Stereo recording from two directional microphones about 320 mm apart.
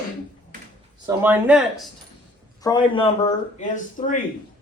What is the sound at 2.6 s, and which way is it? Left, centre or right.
A man's voice, centre.